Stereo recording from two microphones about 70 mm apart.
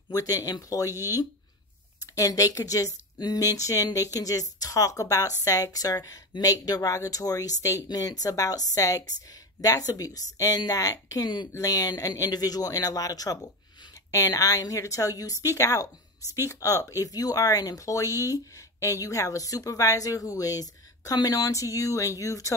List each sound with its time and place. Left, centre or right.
0.1 s speech: left
2.1 s speech: left
11.6 s speech: left
12.2 s a woman's voice: left